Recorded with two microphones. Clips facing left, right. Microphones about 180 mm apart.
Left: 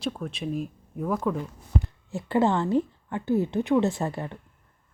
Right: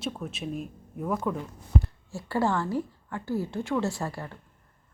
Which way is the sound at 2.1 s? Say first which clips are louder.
Left 4 dB; 20° left (ahead or behind).